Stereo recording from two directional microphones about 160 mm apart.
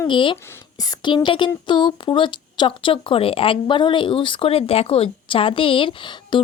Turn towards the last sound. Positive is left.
turn(degrees=30)  # may be behind; listen again after turning